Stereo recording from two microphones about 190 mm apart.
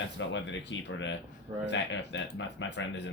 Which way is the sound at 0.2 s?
70° left (ahead or behind).